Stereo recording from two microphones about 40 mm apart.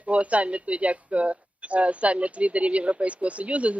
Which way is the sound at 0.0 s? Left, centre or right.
Right.